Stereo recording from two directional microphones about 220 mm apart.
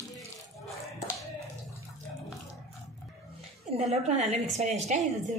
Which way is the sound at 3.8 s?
30° right (ahead or behind).